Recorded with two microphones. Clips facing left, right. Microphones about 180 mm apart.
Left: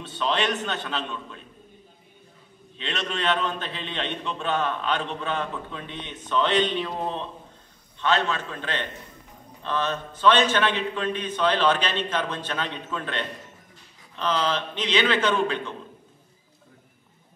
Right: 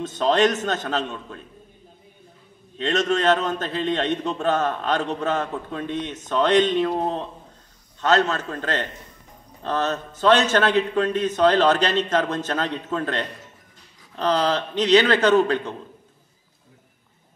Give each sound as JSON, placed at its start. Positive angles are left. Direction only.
{"t": 0.0, "sound": "a man's voice", "side_deg": -45}
{"t": 2.8, "sound": "a man's voice", "side_deg": -45}